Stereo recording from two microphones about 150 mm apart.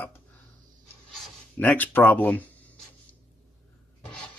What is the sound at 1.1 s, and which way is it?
Speech, 10° left (ahead or behind).